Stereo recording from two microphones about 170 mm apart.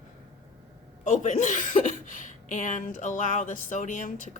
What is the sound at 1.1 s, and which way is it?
A woman's voice, 45° left (ahead or behind).